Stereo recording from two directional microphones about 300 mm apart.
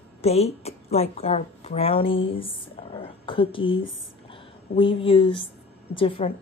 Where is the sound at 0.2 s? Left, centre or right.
Centre.